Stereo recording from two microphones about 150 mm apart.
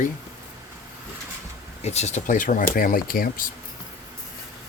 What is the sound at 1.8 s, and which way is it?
Speech, 45° left (ahead or behind).